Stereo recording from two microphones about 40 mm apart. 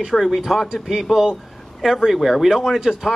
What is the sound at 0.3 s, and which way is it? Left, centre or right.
Speech, centre.